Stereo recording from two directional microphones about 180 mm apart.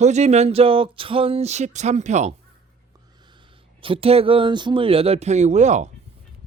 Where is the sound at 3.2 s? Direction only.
25° right (ahead or behind).